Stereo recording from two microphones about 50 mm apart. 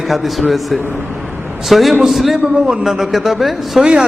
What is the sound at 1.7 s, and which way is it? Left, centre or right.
Speech, centre.